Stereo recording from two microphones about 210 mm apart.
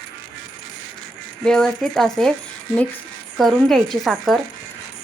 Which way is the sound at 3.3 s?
Centre (ahead or behind).